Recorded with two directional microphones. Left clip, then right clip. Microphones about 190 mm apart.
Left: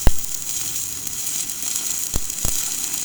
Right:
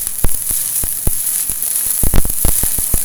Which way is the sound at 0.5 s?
25° right (ahead or behind).